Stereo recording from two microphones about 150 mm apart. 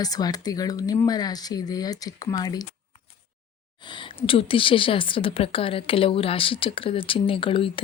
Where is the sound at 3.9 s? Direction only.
35° left (ahead or behind).